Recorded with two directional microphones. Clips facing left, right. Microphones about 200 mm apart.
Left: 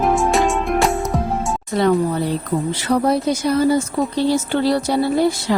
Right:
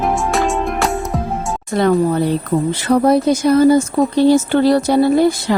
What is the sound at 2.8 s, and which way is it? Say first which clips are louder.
Speech: right 5 dB; 50° right (ahead or behind).